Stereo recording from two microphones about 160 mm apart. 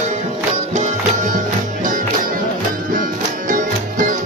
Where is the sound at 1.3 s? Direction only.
55° right (ahead or behind).